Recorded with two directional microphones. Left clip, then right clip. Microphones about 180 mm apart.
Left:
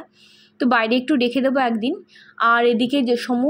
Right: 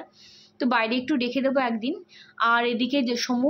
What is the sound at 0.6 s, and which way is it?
A woman's voice, 25° left (ahead or behind).